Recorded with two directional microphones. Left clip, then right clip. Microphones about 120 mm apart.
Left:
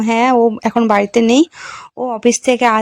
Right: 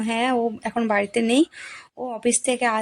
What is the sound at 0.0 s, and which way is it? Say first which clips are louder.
Speech: left 10 dB; 50° left (ahead or behind).